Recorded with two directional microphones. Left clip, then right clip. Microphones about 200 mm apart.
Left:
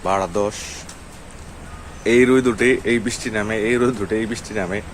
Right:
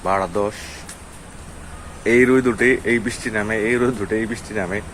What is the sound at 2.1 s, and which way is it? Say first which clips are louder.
Speech: even; 10° left (ahead or behind).